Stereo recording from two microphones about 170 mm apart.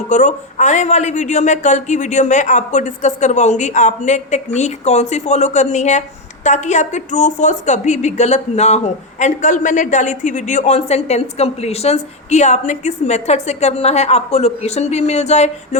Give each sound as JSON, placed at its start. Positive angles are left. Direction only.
{"t": 0.1, "sound": "a woman's voice", "side_deg": 45}